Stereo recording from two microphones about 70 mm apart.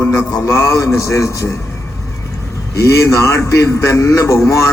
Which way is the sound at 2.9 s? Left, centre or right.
Left.